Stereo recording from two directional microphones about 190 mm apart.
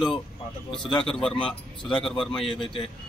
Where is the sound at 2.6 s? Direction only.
25° left (ahead or behind).